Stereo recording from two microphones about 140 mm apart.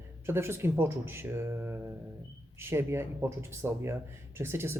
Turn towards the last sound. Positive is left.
turn(degrees=-15)  # may be behind; listen again after turning